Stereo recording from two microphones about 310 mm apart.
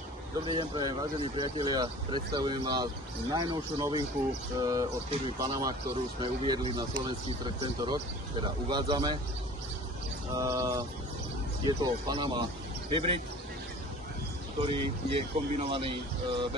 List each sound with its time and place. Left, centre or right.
0.5 s speech: centre
10.3 s speech: centre
14.6 s speech: centre